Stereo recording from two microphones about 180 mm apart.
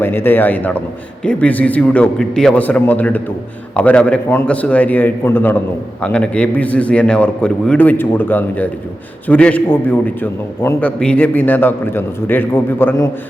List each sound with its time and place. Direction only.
0.0 s a man's voice: 10° left (ahead or behind)